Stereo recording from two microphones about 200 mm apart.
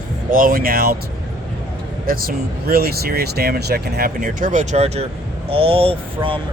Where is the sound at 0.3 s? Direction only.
45° right (ahead or behind).